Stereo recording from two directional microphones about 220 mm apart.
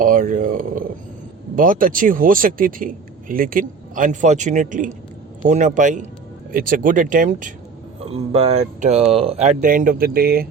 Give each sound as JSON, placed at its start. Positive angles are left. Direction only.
{"t": 0.0, "sound": "speech", "side_deg": -40}